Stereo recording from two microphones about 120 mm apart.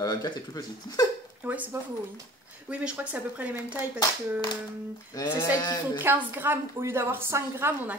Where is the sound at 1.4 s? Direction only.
15° right (ahead or behind).